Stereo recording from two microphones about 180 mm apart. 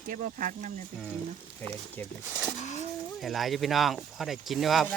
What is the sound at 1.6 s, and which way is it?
Speech, 10° left (ahead or behind).